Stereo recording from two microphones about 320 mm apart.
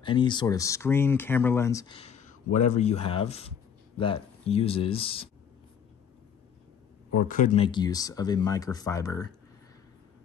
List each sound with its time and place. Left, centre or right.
0.0 s speech: centre
7.2 s speech: left